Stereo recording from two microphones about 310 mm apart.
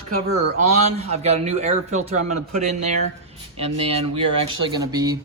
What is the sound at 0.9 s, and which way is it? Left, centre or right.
A man's voice, centre.